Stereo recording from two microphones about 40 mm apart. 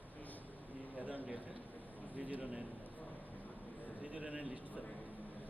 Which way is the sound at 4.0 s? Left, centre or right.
Right.